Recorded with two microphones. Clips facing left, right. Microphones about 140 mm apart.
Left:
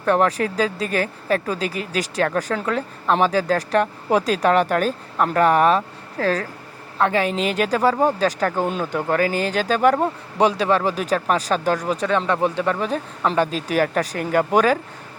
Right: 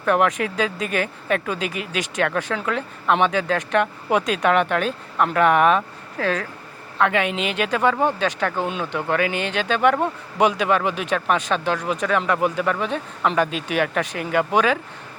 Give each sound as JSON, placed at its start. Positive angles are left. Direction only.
{"t": 0.0, "sound": "speech", "side_deg": 35}